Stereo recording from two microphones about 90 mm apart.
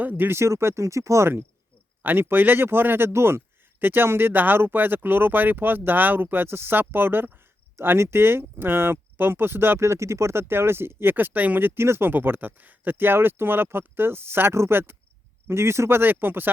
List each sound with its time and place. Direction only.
0.0 s speech: 20° right (ahead or behind)